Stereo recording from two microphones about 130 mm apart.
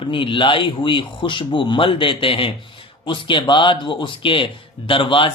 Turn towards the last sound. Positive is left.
turn(degrees=40)  # may be behind; listen again after turning